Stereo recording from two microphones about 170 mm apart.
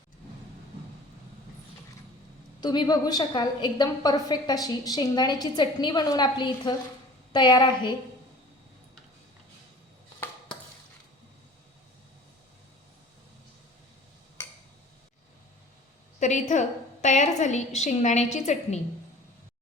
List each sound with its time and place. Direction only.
2.6 s a woman's voice: 25° left (ahead or behind)
16.2 s a woman's voice: 45° left (ahead or behind)